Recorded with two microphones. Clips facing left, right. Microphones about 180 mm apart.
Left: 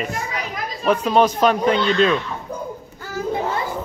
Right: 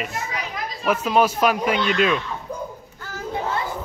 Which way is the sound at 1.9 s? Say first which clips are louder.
Left 2 dB; 30° left (ahead or behind).